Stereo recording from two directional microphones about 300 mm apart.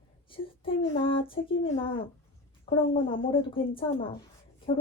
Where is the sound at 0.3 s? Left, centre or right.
Centre.